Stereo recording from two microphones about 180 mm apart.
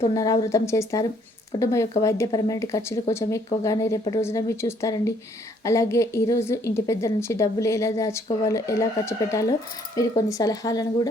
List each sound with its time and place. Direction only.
0.1 s a woman's voice: 20° left (ahead or behind)